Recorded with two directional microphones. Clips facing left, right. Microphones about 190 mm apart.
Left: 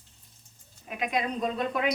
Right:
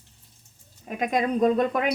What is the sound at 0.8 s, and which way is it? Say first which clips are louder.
Speech: right 5 dB; 45° right (ahead or behind).